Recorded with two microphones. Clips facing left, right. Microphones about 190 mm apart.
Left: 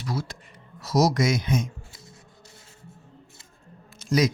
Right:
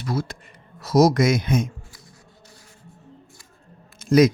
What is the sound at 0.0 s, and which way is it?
Speech, 55° right (ahead or behind).